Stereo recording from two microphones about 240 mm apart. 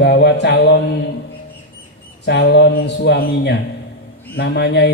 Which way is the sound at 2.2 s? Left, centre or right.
Left.